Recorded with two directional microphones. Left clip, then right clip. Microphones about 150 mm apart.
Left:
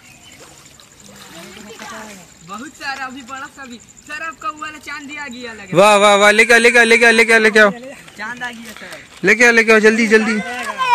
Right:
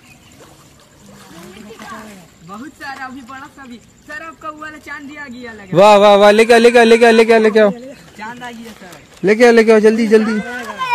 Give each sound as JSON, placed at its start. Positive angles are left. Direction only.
{"t": 5.1, "sound": "speech", "side_deg": -5}
{"t": 5.7, "sound": "a man's voice", "side_deg": -15}
{"t": 9.2, "sound": "speech", "side_deg": -20}